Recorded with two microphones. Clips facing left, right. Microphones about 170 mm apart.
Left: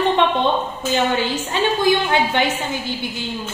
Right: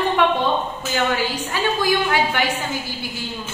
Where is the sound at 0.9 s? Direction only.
25° left (ahead or behind).